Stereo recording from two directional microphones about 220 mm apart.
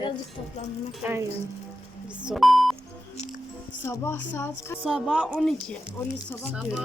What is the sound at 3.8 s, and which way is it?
Speech, 10° left (ahead or behind).